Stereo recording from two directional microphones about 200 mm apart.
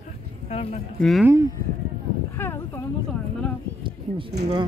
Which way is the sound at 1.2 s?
15° right (ahead or behind).